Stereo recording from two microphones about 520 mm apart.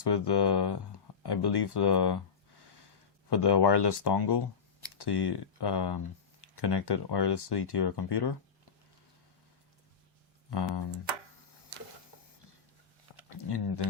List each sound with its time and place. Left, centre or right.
0.0 s speech: left
13.4 s speech: left